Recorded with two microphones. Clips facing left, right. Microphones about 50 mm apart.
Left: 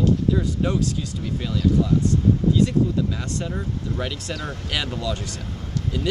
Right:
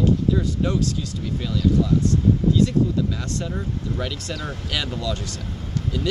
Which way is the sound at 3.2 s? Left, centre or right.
Left.